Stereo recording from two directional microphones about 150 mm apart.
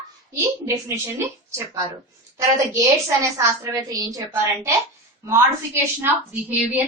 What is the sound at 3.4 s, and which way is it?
A woman's voice, 25° right (ahead or behind).